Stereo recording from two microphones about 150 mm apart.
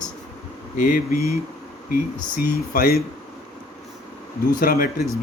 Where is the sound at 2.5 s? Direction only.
75° left (ahead or behind).